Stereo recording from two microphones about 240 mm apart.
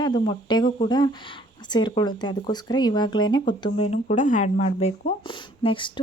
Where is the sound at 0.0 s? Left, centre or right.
Centre.